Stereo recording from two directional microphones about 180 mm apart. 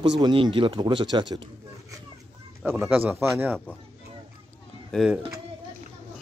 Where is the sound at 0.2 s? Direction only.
30° right (ahead or behind).